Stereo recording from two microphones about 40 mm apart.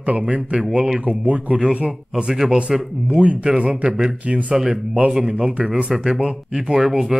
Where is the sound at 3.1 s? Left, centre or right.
Right.